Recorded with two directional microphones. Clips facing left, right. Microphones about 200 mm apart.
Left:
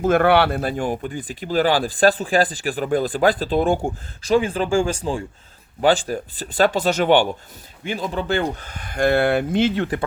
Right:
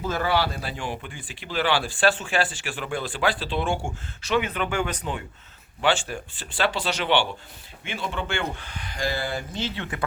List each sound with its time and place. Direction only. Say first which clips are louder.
0.0 s speech: left 9 dB; 60° left (ahead or behind); by 10.0 s 40° left (ahead or behind)